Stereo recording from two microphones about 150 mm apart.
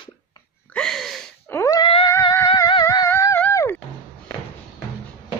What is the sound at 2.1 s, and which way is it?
Music, 20° left (ahead or behind).